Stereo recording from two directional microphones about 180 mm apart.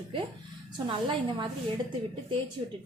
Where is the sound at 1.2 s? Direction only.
25° right (ahead or behind).